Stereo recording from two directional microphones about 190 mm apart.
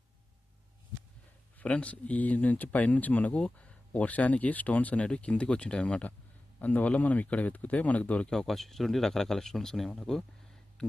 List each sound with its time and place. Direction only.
1.5 s speech: 5° left (ahead or behind)